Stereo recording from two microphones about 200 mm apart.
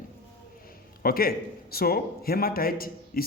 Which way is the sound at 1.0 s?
50° left (ahead or behind).